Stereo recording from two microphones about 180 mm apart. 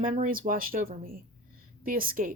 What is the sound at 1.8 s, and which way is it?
Speech, 50° right (ahead or behind).